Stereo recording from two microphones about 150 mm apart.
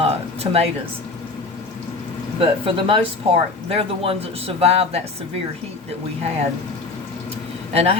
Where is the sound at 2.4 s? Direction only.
35° right (ahead or behind).